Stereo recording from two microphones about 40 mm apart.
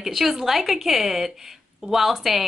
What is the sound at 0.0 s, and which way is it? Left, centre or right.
A woman's voice, centre.